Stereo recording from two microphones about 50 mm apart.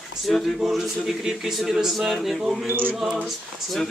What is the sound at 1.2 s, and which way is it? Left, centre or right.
Speech, centre.